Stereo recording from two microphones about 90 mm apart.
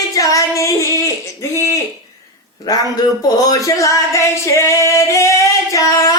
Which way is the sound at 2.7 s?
40° left (ahead or behind).